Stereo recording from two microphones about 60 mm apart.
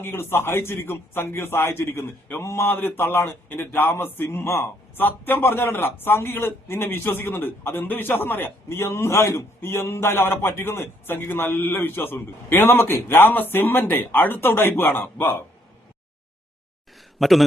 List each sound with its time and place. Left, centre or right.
0.0 s a man's voice: left
4.3 s a man's voice: left
4.9 s a man's voice: left
17.2 s a man's voice: centre